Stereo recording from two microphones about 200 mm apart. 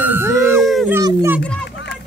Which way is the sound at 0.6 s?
Centre (ahead or behind).